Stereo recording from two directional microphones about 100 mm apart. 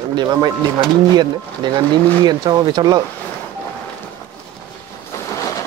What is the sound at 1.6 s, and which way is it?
Speech, 45° right (ahead or behind).